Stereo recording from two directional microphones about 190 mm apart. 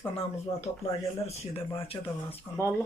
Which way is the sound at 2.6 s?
15° left (ahead or behind).